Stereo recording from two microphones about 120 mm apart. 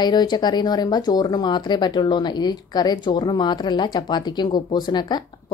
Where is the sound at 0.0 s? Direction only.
35° left (ahead or behind).